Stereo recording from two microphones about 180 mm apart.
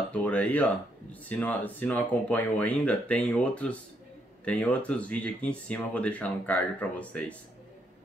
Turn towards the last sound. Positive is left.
turn(degrees=5)  # may be behind; listen again after turning